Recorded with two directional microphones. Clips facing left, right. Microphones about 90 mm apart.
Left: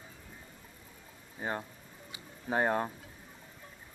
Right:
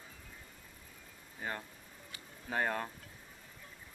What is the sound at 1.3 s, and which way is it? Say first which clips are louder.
Speech: left 5 dB; 25° left (ahead or behind).